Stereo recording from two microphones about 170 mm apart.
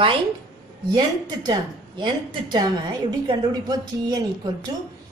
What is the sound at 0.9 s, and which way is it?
A woman's voice, 25° right (ahead or behind).